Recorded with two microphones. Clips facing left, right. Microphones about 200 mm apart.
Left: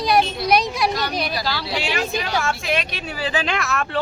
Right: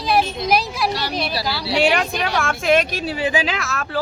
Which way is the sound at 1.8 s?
60° right (ahead or behind).